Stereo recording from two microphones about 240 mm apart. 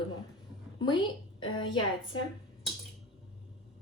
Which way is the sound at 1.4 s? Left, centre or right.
Centre.